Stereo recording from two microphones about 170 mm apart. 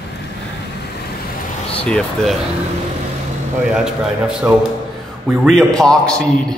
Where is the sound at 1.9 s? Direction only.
5° left (ahead or behind).